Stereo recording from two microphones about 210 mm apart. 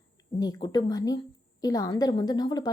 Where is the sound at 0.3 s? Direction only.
20° left (ahead or behind).